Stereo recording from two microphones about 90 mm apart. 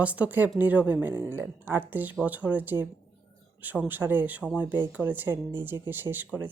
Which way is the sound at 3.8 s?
20° right (ahead or behind).